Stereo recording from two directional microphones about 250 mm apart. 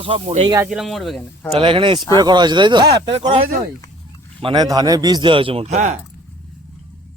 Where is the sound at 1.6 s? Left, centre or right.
Centre.